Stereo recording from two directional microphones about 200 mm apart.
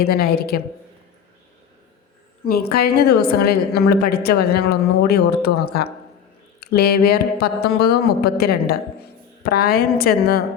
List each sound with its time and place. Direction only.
0.0 s a woman's voice: 50° left (ahead or behind)
2.4 s a woman's voice: 50° left (ahead or behind)